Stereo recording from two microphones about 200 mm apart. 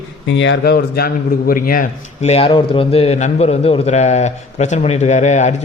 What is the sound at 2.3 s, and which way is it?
A man's voice, 25° left (ahead or behind).